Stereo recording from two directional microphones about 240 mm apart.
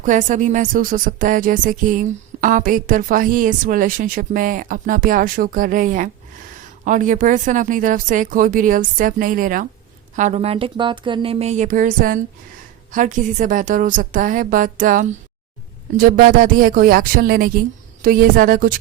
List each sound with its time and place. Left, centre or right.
0.0 s speech: right